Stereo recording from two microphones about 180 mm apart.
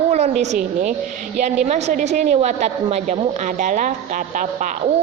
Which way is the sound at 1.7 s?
40° right (ahead or behind).